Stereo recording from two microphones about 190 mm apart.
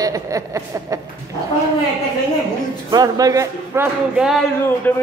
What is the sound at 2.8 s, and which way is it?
Speech, 20° right (ahead or behind).